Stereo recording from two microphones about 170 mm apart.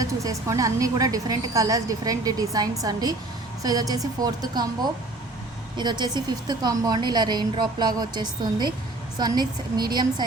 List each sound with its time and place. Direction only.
0.0 s a woman's voice: 20° right (ahead or behind)
5.7 s a woman's voice: 25° right (ahead or behind)